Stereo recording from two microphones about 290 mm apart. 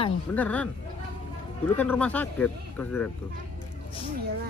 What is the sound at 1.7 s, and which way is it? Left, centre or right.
Speech, centre.